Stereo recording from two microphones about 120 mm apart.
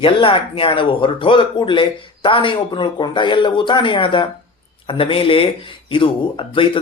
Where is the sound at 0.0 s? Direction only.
45° left (ahead or behind).